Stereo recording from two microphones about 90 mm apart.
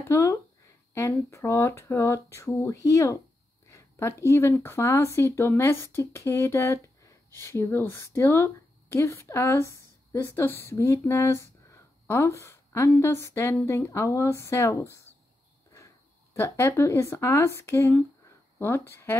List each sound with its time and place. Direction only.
0.1 s speech: 30° left (ahead or behind)
16.3 s speech: 30° left (ahead or behind)